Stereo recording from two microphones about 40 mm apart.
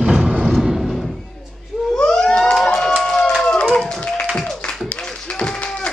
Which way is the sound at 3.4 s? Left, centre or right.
Left.